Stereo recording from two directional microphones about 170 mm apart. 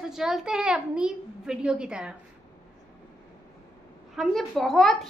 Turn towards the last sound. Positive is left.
turn(degrees=0)  # may be behind; listen again after turning